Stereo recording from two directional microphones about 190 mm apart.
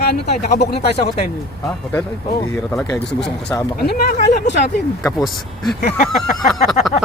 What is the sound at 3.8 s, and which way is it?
Speech, 55° left (ahead or behind).